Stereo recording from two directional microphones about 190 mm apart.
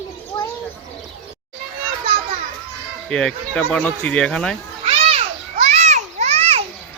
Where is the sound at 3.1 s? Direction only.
5° left (ahead or behind).